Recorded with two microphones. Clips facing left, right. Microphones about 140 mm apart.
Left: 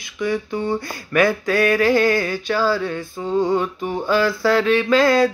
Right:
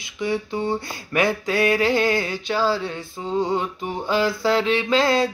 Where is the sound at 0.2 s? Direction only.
25° right (ahead or behind).